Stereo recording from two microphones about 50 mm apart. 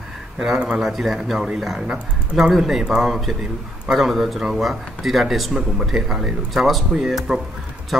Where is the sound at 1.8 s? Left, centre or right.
Centre.